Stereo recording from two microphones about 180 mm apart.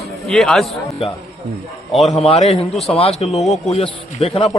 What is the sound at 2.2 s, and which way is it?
A man's voice, 35° left (ahead or behind).